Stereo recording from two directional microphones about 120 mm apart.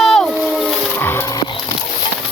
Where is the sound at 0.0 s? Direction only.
Centre (ahead or behind).